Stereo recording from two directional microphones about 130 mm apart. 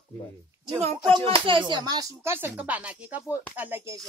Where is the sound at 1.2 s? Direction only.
40° right (ahead or behind).